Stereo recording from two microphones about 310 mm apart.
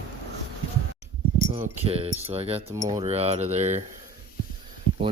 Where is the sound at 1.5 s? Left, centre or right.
Centre.